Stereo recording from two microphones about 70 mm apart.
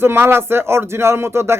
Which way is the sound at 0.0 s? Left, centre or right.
Right.